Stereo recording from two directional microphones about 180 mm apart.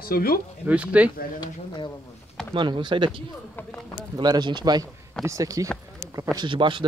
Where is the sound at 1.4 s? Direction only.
25° left (ahead or behind).